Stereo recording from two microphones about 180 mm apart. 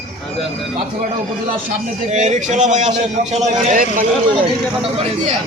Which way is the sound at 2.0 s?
40° right (ahead or behind).